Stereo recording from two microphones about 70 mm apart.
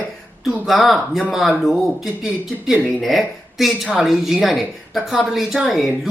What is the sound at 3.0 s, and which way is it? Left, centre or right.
Speech, centre.